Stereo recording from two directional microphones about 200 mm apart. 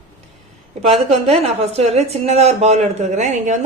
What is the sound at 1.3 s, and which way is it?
Speech, 30° right (ahead or behind).